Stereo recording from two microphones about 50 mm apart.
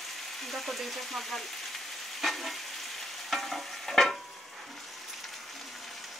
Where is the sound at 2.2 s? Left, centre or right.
Centre.